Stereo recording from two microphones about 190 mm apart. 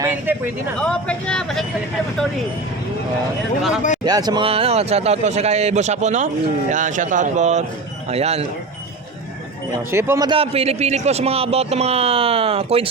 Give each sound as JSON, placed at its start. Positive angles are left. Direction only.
{"t": 0.0, "sound": "speech", "side_deg": -10}
{"t": 0.8, "sound": "speech", "side_deg": 5}
{"t": 4.0, "sound": "a man's voice", "side_deg": -20}
{"t": 9.9, "sound": "a man's voice", "side_deg": -10}
{"t": 10.2, "sound": "a man's voice", "side_deg": -30}